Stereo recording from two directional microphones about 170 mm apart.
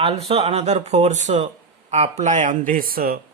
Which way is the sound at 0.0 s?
35° right (ahead or behind).